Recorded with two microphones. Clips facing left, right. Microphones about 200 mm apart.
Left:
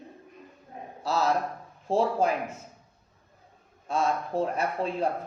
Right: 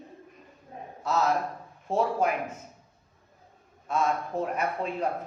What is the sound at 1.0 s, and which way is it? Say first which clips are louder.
A man's voice: even; 30° left (ahead or behind).